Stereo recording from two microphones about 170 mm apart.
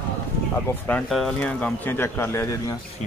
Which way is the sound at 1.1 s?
5° left (ahead or behind).